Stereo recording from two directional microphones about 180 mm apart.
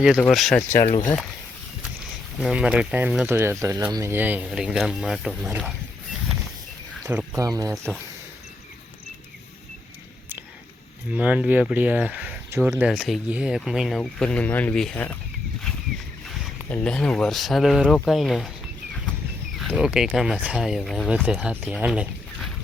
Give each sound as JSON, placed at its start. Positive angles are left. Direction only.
{"t": 0.0, "sound": "speech", "side_deg": 0}
{"t": 0.7, "sound": "speech", "side_deg": 45}
{"t": 2.4, "sound": "speech", "side_deg": -5}
{"t": 7.0, "sound": "speech", "side_deg": -15}
{"t": 11.1, "sound": "speech", "side_deg": -10}
{"t": 16.6, "sound": "speech", "side_deg": 5}
{"t": 19.5, "sound": "speech", "side_deg": -5}